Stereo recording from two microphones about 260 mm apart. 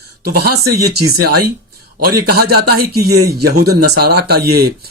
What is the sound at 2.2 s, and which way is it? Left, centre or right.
Speech, right.